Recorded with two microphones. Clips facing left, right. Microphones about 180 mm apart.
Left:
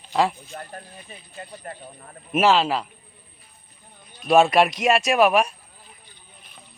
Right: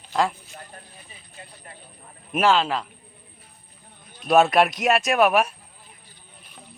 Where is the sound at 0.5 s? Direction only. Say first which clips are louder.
Left 6 dB; 60° left (ahead or behind).